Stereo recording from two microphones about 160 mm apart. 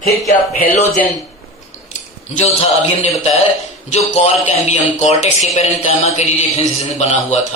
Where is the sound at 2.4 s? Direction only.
40° left (ahead or behind).